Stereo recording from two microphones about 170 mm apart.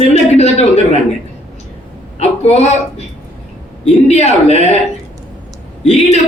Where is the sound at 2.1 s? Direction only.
40° left (ahead or behind).